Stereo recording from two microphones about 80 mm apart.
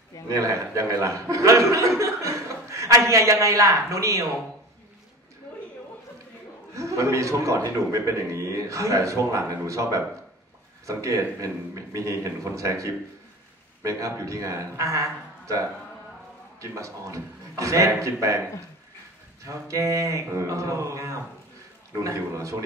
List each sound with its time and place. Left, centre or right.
0.3 s a man's voice: right
6.7 s a man's voice: right
19.4 s a man's voice: right